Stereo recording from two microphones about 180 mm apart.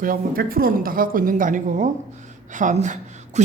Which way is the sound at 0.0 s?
55° right (ahead or behind).